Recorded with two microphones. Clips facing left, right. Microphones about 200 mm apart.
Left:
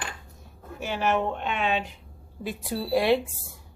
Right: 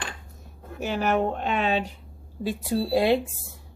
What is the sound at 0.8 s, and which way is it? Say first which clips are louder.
A woman's voice: right 2 dB; 40° right (ahead or behind).